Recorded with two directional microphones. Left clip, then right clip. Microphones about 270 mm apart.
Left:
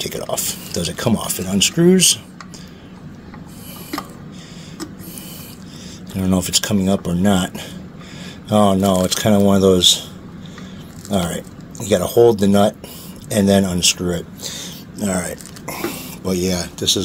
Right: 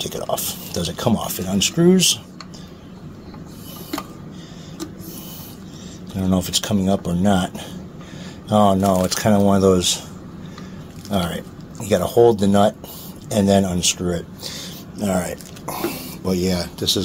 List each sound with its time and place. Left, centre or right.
0.0 s speech: centre
6.1 s speech: centre
11.1 s speech: centre